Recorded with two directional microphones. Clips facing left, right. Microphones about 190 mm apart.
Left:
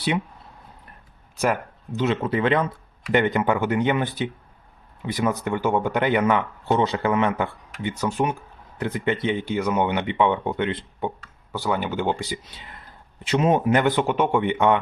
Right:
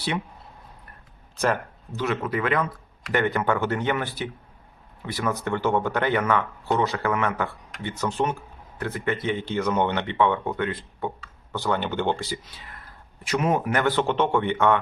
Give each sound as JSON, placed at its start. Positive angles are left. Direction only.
{"t": 1.4, "sound": "speech", "side_deg": 15}
{"t": 11.5, "sound": "speech", "side_deg": 10}